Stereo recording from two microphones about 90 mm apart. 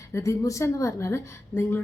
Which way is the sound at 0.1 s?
35° left (ahead or behind).